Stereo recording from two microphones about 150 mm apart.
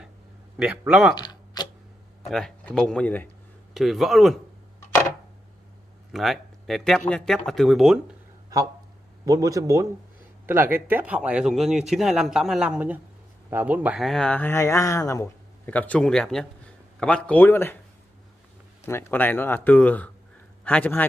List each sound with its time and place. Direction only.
0.6 s speech: 5° right (ahead or behind)
1.1 s a sound: 30° left (ahead or behind)
2.2 s speech: 5° left (ahead or behind)
6.1 s speech: centre (ahead or behind)
9.2 s speech: 25° right (ahead or behind); by 15.7 s 20° left (ahead or behind)
15.7 s speech: 10° left (ahead or behind)
18.9 s speech: 15° left (ahead or behind)